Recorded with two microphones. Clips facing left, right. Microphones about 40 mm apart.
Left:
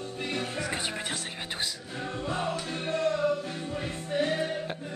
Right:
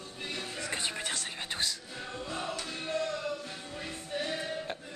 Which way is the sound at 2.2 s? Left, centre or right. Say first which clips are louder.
Left 5 dB; left.